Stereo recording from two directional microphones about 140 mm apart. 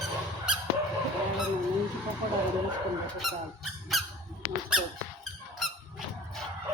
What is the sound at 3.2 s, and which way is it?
Squeak, centre (ahead or behind).